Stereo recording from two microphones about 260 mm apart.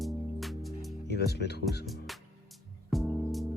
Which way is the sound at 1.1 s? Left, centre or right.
Left.